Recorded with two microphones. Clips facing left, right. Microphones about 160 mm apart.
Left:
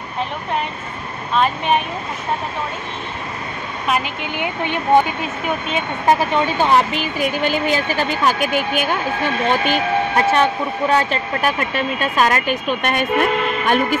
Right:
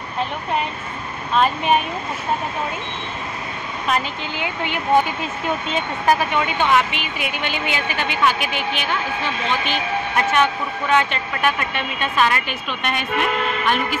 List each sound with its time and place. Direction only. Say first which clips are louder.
6.0 s speech: left 3 dB; 30° left (ahead or behind); by 13.9 s 45° left (ahead or behind)